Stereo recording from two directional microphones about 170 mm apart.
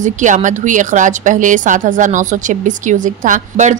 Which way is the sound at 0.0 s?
45° right (ahead or behind).